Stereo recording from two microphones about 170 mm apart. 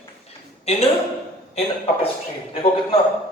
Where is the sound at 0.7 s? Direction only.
35° left (ahead or behind).